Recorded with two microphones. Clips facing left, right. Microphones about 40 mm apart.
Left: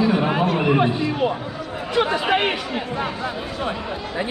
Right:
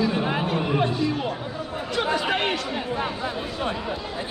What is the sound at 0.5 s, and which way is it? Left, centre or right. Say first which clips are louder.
Speech: left 5 dB; left.